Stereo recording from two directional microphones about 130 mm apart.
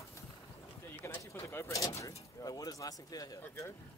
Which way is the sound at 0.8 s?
20° left (ahead or behind).